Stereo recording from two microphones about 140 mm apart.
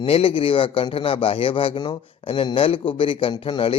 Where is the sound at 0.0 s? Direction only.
45° left (ahead or behind).